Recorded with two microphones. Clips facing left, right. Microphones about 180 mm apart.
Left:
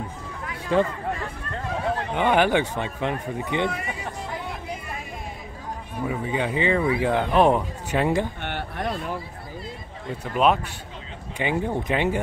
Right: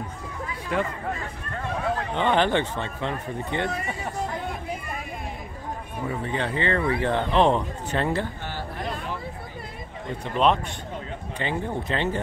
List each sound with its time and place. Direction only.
0.7 s speech: 30° left (ahead or behind)
2.1 s speech: 10° left (ahead or behind)
6.0 s speech: 10° left (ahead or behind)
8.4 s a sound: 65° left (ahead or behind)
10.2 s speech: 5° left (ahead or behind)